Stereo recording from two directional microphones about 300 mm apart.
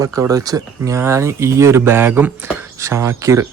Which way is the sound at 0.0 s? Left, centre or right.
Centre.